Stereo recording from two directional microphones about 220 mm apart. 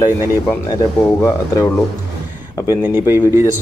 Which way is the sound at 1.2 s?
15° left (ahead or behind).